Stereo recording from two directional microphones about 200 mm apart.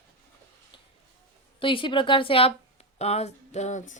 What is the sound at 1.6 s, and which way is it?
Speech, 25° left (ahead or behind).